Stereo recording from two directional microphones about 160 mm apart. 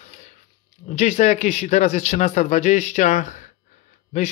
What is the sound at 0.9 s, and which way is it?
Speech, 45° left (ahead or behind).